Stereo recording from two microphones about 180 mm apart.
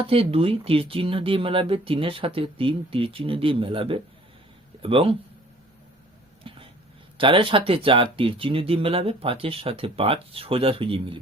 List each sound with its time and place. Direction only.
0.0 s speech: 30° right (ahead or behind)
6.5 s a sound: 30° right (ahead or behind)
7.2 s speech: 30° right (ahead or behind)